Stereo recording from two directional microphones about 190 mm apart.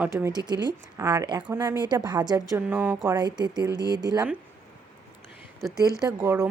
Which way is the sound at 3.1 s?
20° right (ahead or behind).